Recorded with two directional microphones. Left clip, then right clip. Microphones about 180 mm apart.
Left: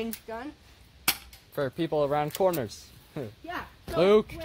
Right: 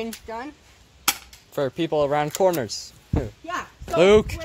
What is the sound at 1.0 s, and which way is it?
Speech, 30° right (ahead or behind).